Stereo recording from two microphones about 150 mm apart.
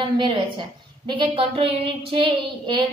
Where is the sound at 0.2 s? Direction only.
30° right (ahead or behind).